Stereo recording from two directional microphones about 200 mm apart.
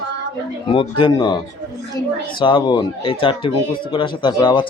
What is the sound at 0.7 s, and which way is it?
Speech, 25° left (ahead or behind).